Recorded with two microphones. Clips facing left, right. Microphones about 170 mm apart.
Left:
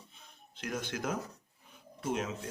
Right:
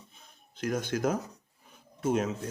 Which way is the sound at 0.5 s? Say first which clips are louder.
Right 7 dB; 45° right (ahead or behind).